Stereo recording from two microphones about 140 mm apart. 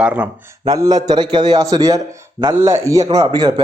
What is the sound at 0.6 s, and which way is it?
A man's voice, 25° right (ahead or behind).